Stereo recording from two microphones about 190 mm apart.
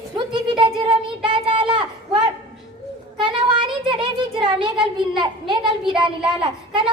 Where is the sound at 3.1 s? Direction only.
25° right (ahead or behind).